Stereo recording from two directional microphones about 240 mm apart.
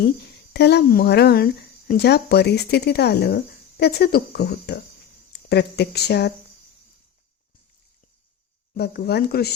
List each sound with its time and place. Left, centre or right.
0.5 s speech: left
8.7 s speech: left